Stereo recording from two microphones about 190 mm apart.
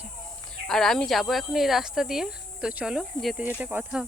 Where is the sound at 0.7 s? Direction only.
Centre (ahead or behind).